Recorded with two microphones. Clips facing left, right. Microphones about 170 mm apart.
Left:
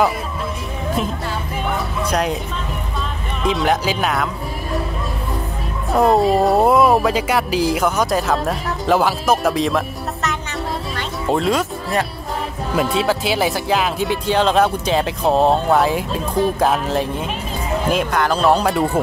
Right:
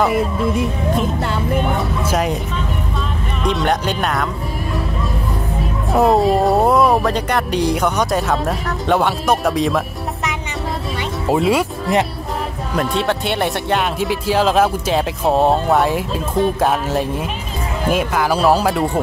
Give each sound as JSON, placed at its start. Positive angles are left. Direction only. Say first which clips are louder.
{"t": 2.0, "sound": "speech", "louder": "even", "side_deg": 0}
{"t": 3.4, "sound": "speech", "louder": "even", "side_deg": 0}
{"t": 5.9, "sound": "speech", "louder": "even", "side_deg": 0}
{"t": 11.0, "sound": "music", "louder": "right 3 dB", "side_deg": -5}
{"t": 12.7, "sound": "speech", "louder": "left 1 dB", "side_deg": 0}